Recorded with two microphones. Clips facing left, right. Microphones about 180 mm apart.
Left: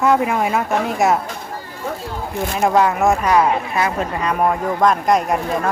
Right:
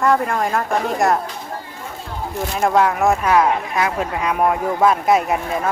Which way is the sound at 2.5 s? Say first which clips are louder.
Left 1 dB; centre (ahead or behind).